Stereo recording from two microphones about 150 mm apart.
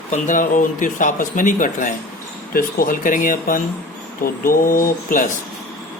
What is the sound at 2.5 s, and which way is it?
A man's voice, 75° left (ahead or behind).